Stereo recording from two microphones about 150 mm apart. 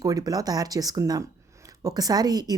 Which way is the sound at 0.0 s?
25° right (ahead or behind).